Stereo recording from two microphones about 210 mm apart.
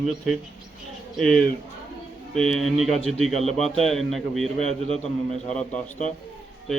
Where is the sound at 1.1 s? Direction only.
Centre (ahead or behind).